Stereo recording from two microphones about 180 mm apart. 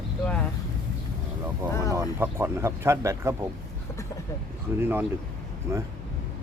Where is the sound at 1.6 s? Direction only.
15° right (ahead or behind).